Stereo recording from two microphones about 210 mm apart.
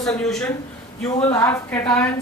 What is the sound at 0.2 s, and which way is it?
Speech, 5° left (ahead or behind).